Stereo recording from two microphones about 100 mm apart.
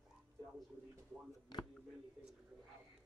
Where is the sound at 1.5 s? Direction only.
45° left (ahead or behind).